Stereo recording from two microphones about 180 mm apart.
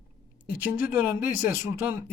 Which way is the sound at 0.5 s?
10° right (ahead or behind).